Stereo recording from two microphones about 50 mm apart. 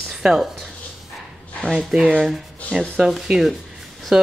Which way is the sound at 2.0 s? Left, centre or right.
Centre.